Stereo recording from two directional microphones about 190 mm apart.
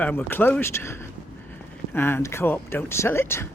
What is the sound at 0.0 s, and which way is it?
Speech, 10° left (ahead or behind).